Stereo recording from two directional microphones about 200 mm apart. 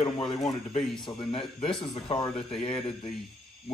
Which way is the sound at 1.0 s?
25° left (ahead or behind).